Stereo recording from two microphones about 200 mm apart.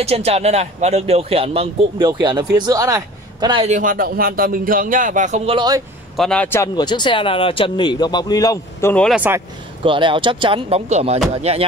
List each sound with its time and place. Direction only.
0.0 s speech: 30° right (ahead or behind)
3.7 s a man's voice: 45° right (ahead or behind); by 5.8 s 25° right (ahead or behind)
6.1 s speech: 5° left (ahead or behind)
8.9 s speech: 5° left (ahead or behind)
9.8 s speech: 25° right (ahead or behind)